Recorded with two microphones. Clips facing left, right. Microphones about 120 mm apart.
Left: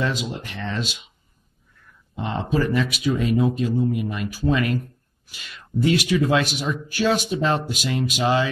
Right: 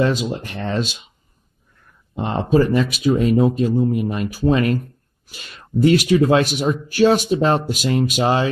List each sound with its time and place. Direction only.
0.0 s speech: 40° right (ahead or behind)
2.1 s speech: 40° right (ahead or behind)